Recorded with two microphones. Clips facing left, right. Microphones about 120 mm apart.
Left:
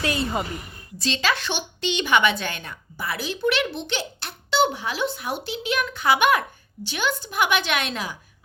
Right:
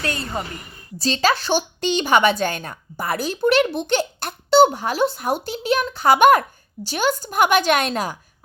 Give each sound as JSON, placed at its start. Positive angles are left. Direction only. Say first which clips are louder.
{"t": 0.3, "sound": "speech", "louder": "left 1 dB", "side_deg": 10}
{"t": 0.9, "sound": "a woman's voice", "louder": "right 5 dB", "side_deg": -40}